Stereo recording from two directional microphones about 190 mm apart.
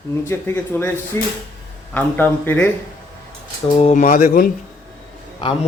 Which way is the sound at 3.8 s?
35° left (ahead or behind).